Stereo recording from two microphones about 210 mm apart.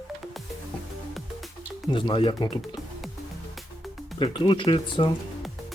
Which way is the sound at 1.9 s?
25° left (ahead or behind).